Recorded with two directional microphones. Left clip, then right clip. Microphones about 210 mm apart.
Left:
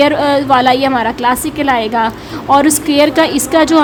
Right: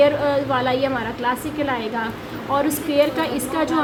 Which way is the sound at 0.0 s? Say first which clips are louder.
Left 6 dB; 50° left (ahead or behind).